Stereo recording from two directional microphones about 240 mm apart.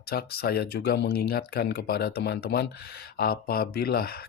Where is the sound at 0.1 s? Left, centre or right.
Left.